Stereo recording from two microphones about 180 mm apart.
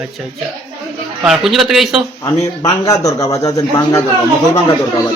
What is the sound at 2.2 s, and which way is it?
A man's voice, 20° left (ahead or behind).